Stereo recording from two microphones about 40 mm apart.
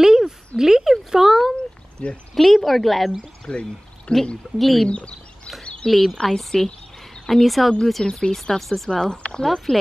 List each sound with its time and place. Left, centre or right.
0.0 s a sound: centre
0.6 s a child's voice: centre
2.0 s speech: left
2.3 s speech: centre
3.5 s speech: centre
4.1 s speech: left
4.6 s speech: centre
4.8 s speech: left
5.6 s a sound: centre
5.9 s speech: centre
7.8 s speech: centre
8.4 s speech: centre
9.1 s speech: left
9.4 s speech: centre